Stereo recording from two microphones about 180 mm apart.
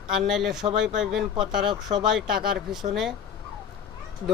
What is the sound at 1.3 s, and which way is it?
Speech, 25° right (ahead or behind).